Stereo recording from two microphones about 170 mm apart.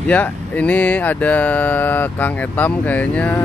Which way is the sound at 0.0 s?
10° left (ahead or behind).